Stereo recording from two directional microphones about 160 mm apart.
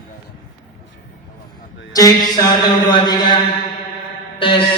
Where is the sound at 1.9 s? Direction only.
20° left (ahead or behind).